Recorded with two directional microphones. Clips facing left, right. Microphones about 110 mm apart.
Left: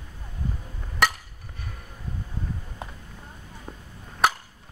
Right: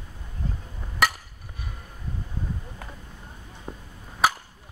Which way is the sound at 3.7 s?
10° right (ahead or behind).